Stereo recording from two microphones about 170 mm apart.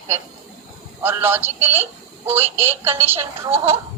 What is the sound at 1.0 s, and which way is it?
Speech, 10° right (ahead or behind).